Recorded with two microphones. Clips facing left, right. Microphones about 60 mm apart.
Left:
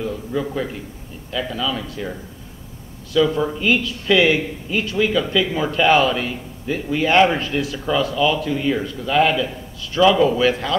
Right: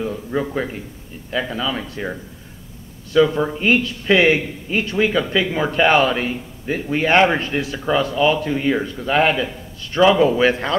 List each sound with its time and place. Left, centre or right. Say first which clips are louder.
0.0 s speech: right 1 dB; right
3.3 s a man's voice: right 1 dB; right
7.7 s a man's voice: right 4 dB; centre
8.0 s a man's voice: right 1 dB; right